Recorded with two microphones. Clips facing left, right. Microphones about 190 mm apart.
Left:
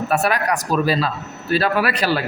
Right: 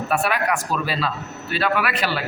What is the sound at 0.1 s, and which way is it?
A man's voice, 40° left (ahead or behind).